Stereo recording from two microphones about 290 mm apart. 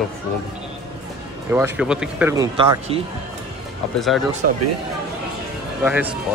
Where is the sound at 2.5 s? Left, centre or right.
Centre.